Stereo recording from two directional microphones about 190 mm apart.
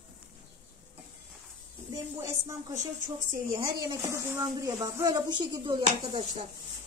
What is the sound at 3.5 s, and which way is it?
Speech, 20° right (ahead or behind).